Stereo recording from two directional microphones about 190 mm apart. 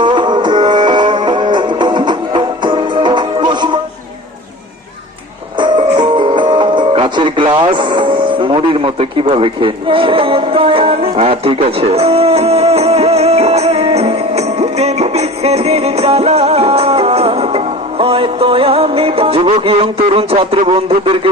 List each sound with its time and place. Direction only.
0.0 s music: 25° right (ahead or behind)
5.5 s music: 25° right (ahead or behind)